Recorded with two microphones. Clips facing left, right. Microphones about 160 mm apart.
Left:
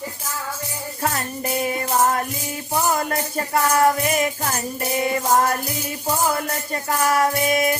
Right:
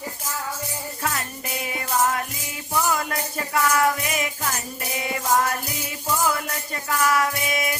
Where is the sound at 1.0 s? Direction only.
40° left (ahead or behind).